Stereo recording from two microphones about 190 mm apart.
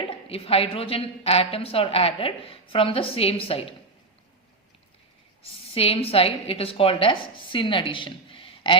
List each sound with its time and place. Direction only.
0.1 s a woman's voice: 30° left (ahead or behind)
5.4 s a woman's voice: 30° left (ahead or behind)